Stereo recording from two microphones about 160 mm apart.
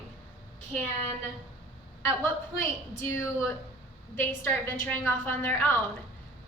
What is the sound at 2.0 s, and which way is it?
A woman's voice, 15° left (ahead or behind).